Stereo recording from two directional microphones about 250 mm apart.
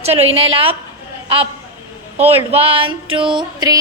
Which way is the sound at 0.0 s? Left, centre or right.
Right.